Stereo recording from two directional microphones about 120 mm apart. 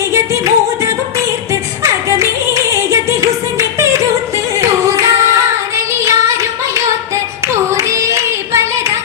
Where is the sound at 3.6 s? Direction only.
25° right (ahead or behind).